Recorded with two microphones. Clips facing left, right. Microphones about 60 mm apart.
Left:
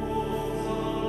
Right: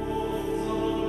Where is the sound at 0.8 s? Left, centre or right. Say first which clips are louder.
Right 2 dB; left.